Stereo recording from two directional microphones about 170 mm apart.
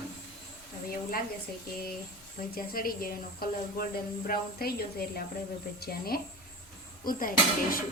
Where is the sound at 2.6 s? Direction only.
60° left (ahead or behind).